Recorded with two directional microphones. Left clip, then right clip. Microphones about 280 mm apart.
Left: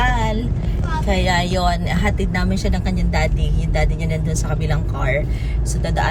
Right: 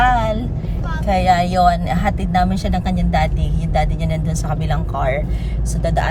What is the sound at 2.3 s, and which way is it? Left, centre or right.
Speech, right.